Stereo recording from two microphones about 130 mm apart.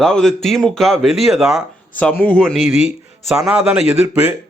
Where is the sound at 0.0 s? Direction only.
5° left (ahead or behind).